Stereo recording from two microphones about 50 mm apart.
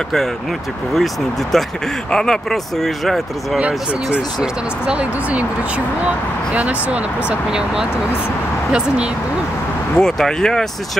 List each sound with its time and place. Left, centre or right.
0.9 s speech: centre
3.5 s speech: right
6.5 s speech: right
8.7 s speech: right
9.9 s speech: centre